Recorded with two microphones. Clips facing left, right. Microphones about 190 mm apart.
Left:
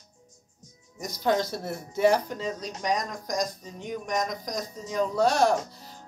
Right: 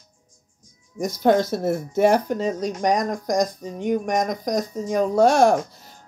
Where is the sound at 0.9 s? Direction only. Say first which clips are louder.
Right 7 dB; 50° right (ahead or behind).